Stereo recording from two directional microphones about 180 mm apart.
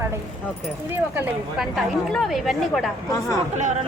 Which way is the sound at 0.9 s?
10° right (ahead or behind).